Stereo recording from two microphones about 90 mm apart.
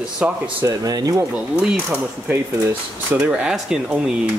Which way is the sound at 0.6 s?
45° right (ahead or behind).